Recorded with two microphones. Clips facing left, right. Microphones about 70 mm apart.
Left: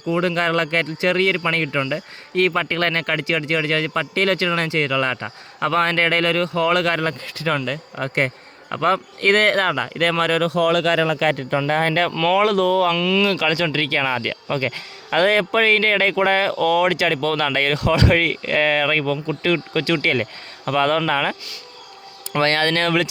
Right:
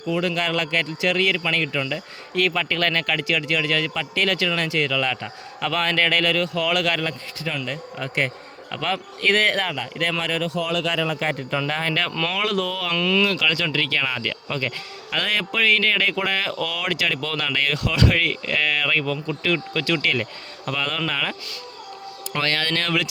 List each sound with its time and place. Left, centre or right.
0.1 s speech: left
7.1 s speech: left
11.7 s speech: left
12.2 s speech: left
12.9 s speech: centre
13.2 s speech: left
22.4 s speech: left